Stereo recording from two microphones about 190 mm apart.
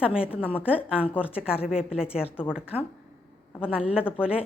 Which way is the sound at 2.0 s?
30° left (ahead or behind).